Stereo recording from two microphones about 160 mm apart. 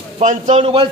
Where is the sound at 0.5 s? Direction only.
35° right (ahead or behind).